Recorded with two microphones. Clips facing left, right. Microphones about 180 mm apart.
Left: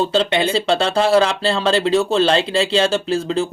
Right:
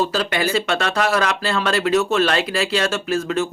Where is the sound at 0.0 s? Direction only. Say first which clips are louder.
Left 3 dB; 25° left (ahead or behind).